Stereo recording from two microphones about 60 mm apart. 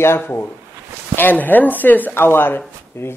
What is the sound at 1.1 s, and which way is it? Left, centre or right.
A woman's voice, left.